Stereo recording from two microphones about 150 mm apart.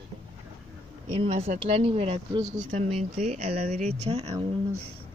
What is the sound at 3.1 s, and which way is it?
Speech, 50° right (ahead or behind).